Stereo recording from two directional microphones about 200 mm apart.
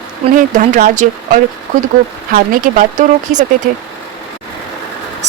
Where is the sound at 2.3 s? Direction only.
45° right (ahead or behind).